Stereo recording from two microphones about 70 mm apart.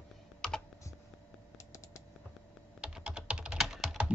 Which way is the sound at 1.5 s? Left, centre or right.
Left.